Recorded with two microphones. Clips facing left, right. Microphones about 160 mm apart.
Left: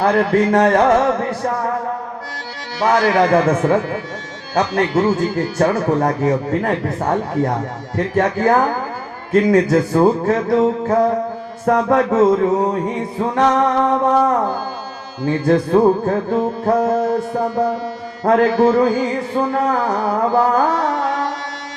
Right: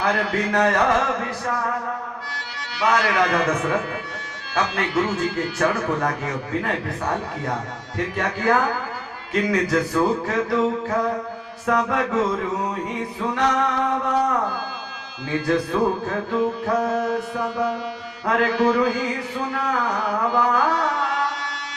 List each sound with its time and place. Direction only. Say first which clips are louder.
0.0 s a man's voice: left 8 dB; 50° left (ahead or behind)
2.8 s a man's voice: left 6 dB; 45° left (ahead or behind)
16.8 s mantra: left 6 dB; 25° left (ahead or behind)
18.3 s a man's voice: left 6 dB; 45° left (ahead or behind)
20.3 s music: left 4 dB; 50° left (ahead or behind)